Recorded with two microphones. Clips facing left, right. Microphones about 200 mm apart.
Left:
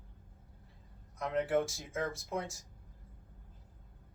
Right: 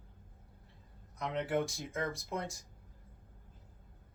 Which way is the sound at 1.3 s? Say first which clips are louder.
Left 3 dB; 5° left (ahead or behind).